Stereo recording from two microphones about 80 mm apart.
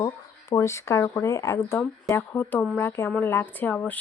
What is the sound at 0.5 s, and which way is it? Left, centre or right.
Speech, left.